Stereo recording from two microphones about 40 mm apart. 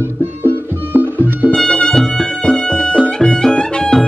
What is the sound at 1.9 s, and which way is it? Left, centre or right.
Music, centre.